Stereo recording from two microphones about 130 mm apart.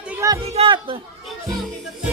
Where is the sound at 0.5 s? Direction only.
45° right (ahead or behind).